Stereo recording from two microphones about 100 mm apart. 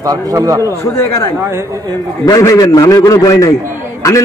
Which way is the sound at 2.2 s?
35° left (ahead or behind).